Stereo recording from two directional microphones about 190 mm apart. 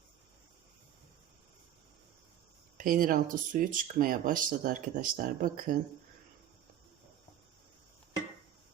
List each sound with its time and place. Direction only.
2.7 s speech: 45° right (ahead or behind)